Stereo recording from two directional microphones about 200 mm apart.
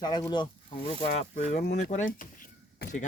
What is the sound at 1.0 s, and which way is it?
Speech, 35° left (ahead or behind).